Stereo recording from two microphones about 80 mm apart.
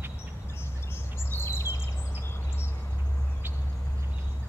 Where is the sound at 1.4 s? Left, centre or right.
Left.